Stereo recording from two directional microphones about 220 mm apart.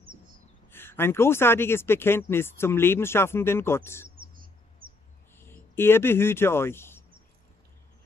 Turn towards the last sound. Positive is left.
turn(degrees=10)  # may be behind; listen again after turning